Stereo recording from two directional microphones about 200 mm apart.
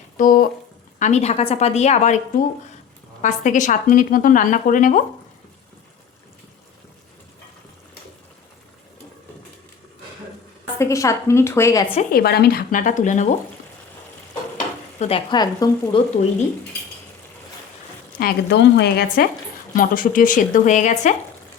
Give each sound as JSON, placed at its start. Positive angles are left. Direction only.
{"t": 0.2, "sound": "a woman's voice", "side_deg": 45}
{"t": 10.8, "sound": "a woman's voice", "side_deg": 15}
{"t": 12.1, "sound": "a woman's voice", "side_deg": 50}
{"t": 14.9, "sound": "speech", "side_deg": 30}
{"t": 18.2, "sound": "a woman's voice", "side_deg": 55}